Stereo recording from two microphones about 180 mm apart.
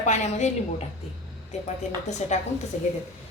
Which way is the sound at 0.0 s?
40° left (ahead or behind).